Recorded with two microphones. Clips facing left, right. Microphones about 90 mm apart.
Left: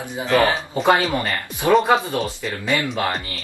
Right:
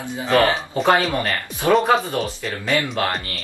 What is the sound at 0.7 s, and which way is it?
Speech, centre (ahead or behind).